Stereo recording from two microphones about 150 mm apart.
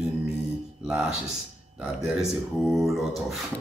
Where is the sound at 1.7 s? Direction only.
5° right (ahead or behind).